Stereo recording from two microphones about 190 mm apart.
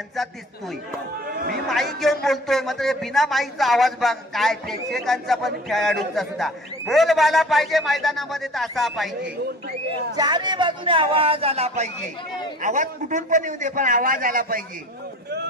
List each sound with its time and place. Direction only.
1.7 s speech: centre (ahead or behind)
10.1 s a man's voice: 20° right (ahead or behind); by 14.6 s 50° right (ahead or behind)